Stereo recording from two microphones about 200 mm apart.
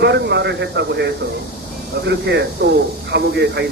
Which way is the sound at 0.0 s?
60° right (ahead or behind).